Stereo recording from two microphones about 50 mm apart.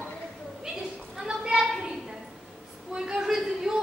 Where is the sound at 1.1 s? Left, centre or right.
Centre.